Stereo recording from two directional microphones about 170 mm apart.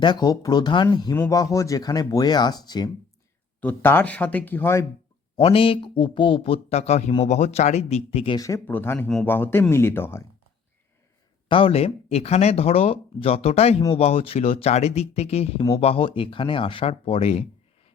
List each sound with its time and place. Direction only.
0.0 s speech: 25° left (ahead or behind)
3.6 s speech: 10° left (ahead or behind)
5.4 s speech: 30° left (ahead or behind)
8.4 s speech: 15° left (ahead or behind)
11.4 s speech: 30° left (ahead or behind)